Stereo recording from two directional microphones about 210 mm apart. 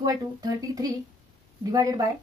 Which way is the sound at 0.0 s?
15° right (ahead or behind).